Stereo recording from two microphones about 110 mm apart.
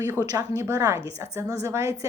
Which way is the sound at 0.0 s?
25° right (ahead or behind).